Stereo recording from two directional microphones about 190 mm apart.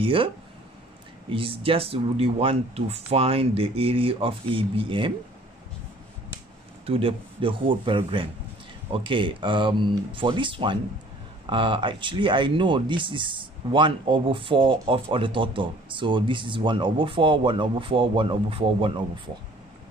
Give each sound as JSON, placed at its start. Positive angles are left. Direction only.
{"t": 0.0, "sound": "speech", "side_deg": -25}
{"t": 1.3, "sound": "speech", "side_deg": -30}
{"t": 6.9, "sound": "speech", "side_deg": -30}